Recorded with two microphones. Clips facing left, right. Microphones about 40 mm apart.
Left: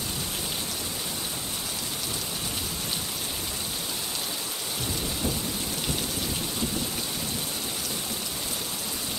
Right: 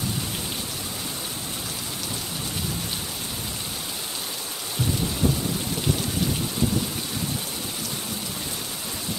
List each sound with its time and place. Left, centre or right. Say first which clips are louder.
5.2 s rain: right 7 dB; right